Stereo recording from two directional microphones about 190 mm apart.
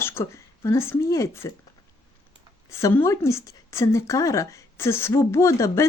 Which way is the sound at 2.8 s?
15° left (ahead or behind).